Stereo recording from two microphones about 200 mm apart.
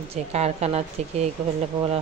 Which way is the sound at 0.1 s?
30° right (ahead or behind).